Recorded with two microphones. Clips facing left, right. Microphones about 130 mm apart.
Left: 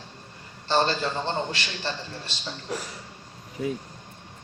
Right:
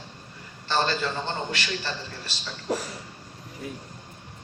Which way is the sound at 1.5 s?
30° left (ahead or behind).